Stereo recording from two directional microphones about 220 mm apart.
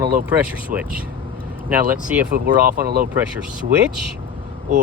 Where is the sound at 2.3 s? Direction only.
45° right (ahead or behind).